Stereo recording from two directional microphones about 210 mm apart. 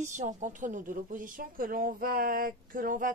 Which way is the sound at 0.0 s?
35° right (ahead or behind).